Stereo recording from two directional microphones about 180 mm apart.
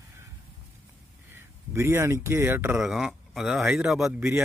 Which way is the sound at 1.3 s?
15° right (ahead or behind).